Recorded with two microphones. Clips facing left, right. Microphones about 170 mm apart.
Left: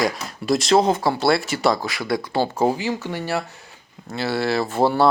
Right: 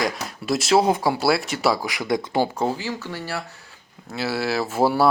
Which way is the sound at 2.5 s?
15° left (ahead or behind).